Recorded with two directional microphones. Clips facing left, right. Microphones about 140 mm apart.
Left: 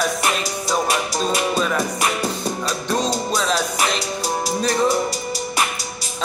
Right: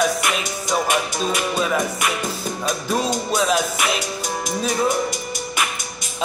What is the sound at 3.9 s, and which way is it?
Music, 35° left (ahead or behind).